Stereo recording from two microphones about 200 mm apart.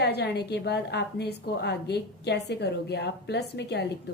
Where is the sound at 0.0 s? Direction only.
55° left (ahead or behind).